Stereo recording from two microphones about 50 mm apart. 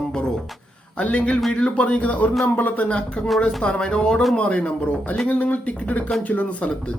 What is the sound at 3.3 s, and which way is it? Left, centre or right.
A man's voice, centre.